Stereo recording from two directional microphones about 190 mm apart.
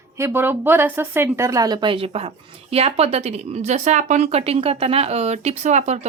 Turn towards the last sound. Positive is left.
turn(degrees=-40)  # may be behind; listen again after turning